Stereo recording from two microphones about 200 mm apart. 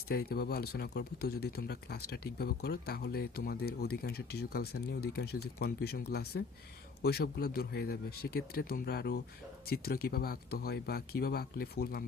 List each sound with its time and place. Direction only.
0.1 s speech: 50° left (ahead or behind)